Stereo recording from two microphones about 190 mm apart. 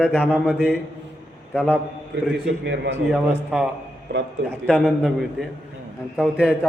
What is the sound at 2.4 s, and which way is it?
Speech, 70° right (ahead or behind).